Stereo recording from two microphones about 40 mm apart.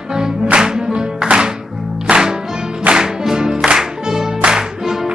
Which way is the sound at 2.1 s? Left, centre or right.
Right.